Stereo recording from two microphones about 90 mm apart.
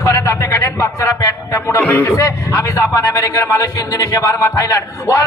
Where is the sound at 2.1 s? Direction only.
40° left (ahead or behind).